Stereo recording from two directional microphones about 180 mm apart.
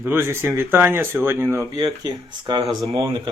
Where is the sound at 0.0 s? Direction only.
15° right (ahead or behind).